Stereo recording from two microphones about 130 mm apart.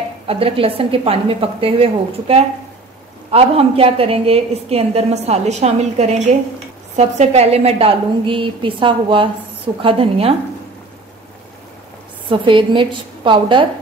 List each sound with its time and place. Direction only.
0.3 s a woman's voice: 45° right (ahead or behind)
12.3 s a woman's voice: 40° right (ahead or behind)